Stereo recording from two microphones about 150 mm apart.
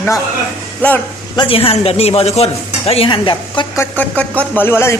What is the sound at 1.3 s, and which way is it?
Speech, 35° left (ahead or behind).